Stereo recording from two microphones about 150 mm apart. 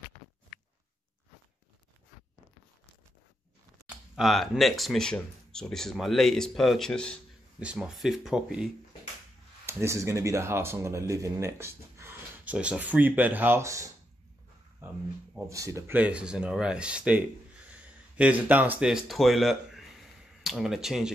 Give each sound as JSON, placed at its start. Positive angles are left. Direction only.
{"t": 4.1, "sound": "speech", "side_deg": 0}
{"t": 7.6, "sound": "speech", "side_deg": -5}
{"t": 9.7, "sound": "speech", "side_deg": -20}
{"t": 14.8, "sound": "a sound", "side_deg": -20}
{"t": 15.4, "sound": "speech", "side_deg": -20}